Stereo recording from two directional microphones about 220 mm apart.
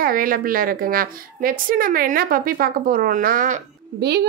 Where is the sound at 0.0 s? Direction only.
40° right (ahead or behind).